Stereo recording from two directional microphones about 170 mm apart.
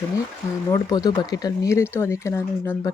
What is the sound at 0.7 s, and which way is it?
Speech, 20° left (ahead or behind).